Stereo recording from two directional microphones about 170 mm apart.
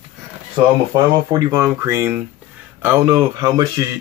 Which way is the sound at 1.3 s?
20° right (ahead or behind).